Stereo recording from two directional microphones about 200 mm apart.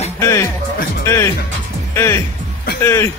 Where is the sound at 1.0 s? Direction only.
15° left (ahead or behind).